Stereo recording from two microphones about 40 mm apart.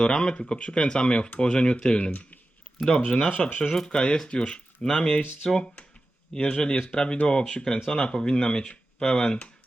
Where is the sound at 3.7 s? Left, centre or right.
Centre.